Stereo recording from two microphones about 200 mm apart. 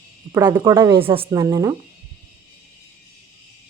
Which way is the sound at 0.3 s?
15° right (ahead or behind).